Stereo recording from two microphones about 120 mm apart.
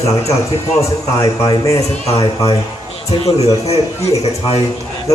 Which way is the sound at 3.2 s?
60° left (ahead or behind).